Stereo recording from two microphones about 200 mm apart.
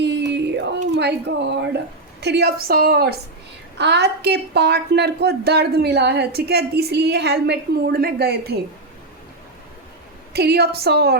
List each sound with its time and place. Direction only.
0.0 s a sound: 60° right (ahead or behind)
0.9 s a woman's voice: 60° right (ahead or behind)
10.3 s a woman's voice: 55° right (ahead or behind)